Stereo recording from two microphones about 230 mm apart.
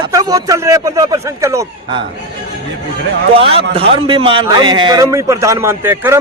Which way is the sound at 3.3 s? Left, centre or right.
Right.